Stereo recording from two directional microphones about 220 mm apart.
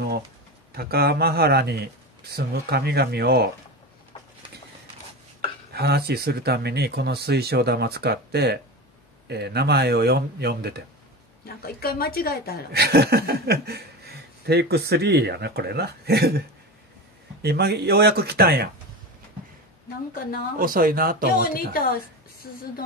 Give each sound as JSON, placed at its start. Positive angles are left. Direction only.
{"t": 0.7, "sound": "speech", "side_deg": -45}
{"t": 5.7, "sound": "speech", "side_deg": -45}
{"t": 11.4, "sound": "a woman's voice", "side_deg": 45}
{"t": 12.7, "sound": "speech", "side_deg": -45}
{"t": 20.5, "sound": "speech", "side_deg": -40}
{"t": 21.5, "sound": "a woman's voice", "side_deg": 40}